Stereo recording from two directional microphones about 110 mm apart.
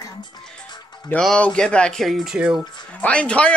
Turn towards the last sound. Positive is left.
turn(degrees=10)  # may be behind; listen again after turning